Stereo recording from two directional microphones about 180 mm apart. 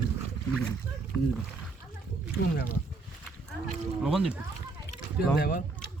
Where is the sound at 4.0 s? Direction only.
5° right (ahead or behind).